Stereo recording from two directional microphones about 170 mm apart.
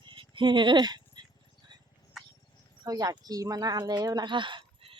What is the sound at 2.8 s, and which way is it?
Speech, 20° right (ahead or behind).